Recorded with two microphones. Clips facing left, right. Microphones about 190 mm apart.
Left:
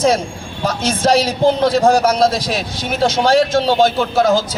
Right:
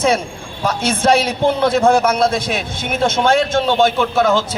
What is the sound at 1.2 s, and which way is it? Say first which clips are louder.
A man's voice: left 2 dB; 35° left (ahead or behind).